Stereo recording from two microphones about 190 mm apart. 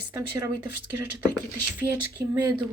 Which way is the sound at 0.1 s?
15° right (ahead or behind).